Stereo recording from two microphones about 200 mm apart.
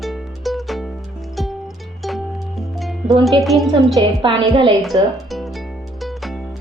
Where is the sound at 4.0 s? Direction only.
25° right (ahead or behind).